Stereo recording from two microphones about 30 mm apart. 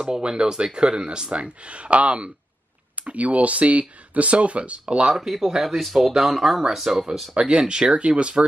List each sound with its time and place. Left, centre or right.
0.1 s speech: right
1.6 s speech: right
5.1 s speech: centre
7.3 s speech: right
7.9 s speech: right